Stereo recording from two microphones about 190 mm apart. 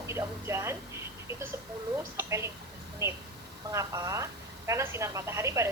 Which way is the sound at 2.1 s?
15° right (ahead or behind).